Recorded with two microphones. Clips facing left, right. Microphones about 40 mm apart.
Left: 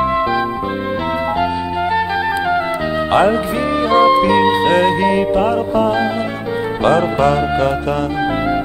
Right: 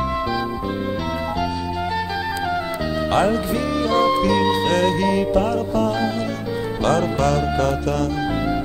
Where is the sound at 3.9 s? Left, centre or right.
Left.